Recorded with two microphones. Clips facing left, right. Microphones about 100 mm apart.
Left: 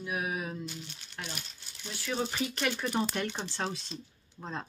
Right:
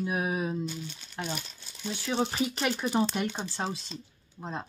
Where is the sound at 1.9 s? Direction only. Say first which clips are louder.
Right 4 dB; 25° right (ahead or behind).